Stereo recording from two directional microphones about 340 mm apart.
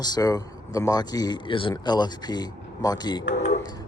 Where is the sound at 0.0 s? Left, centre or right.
Centre.